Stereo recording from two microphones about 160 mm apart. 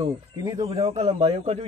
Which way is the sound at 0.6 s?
35° right (ahead or behind).